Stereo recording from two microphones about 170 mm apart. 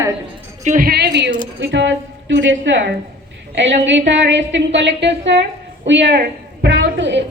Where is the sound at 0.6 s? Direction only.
50° right (ahead or behind); by 1.3 s 80° right.